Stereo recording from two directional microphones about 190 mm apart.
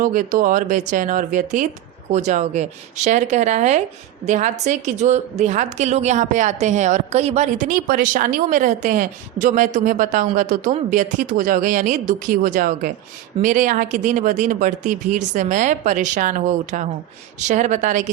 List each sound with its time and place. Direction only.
0.0 s a woman's voice: 45° right (ahead or behind)